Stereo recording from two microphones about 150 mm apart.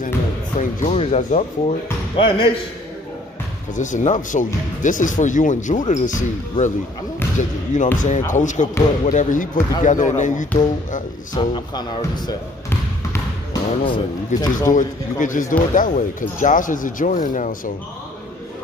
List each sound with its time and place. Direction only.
0.6 s speech: 50° left (ahead or behind)
3.7 s speech: 55° left (ahead or behind)
11.4 s speech: 30° left (ahead or behind)
12.6 s trickle: 15° left (ahead or behind)
13.7 s speech: 35° left (ahead or behind)
14.7 s speech: 60° left (ahead or behind)